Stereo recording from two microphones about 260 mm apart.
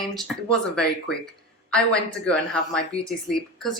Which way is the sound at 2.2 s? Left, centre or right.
Centre.